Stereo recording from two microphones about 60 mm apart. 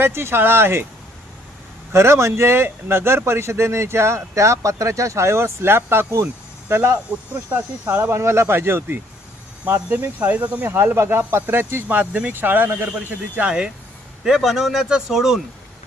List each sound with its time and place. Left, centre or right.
0.0 s speech: right
1.9 s speech: right
8.1 s speech: right
10.2 s speech: right
10.7 s speech: right
11.9 s speech: right
13.4 s speech: centre